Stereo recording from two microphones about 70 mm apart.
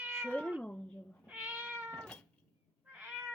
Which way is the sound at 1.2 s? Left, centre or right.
Right.